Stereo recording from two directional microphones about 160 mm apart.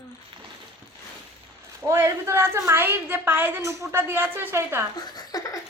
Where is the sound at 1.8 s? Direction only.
15° right (ahead or behind).